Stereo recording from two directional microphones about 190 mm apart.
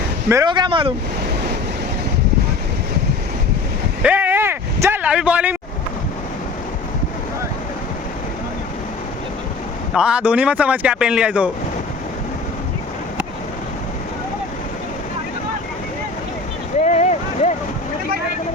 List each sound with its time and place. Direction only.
0.3 s speech: 20° right (ahead or behind)
4.0 s vehicle: 10° right (ahead or behind)
9.9 s speech: 5° right (ahead or behind)
16.8 s boat: 35° left (ahead or behind)